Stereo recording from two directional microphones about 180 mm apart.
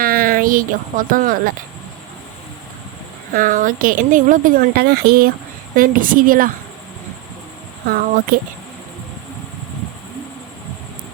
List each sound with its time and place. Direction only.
0.0 s speech: 55° right (ahead or behind)
3.3 s speech: 50° right (ahead or behind)
8.3 s speech: 55° right (ahead or behind)